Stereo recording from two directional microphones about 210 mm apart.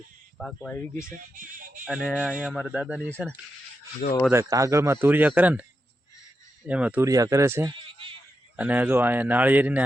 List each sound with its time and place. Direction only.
0.3 s speech: centre (ahead or behind)
1.4 s speech: 40° right (ahead or behind)
1.8 s speech: centre (ahead or behind)
4.3 s speech: 15° right (ahead or behind)
6.7 s speech: 5° right (ahead or behind)